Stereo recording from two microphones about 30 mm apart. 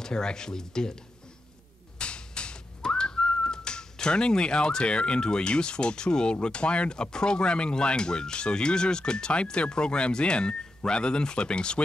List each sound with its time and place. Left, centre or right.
0.0 s speech: left
2.0 s whistling: left
3.4 s speech: left